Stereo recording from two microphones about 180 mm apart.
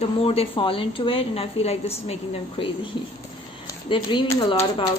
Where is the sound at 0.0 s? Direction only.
30° left (ahead or behind).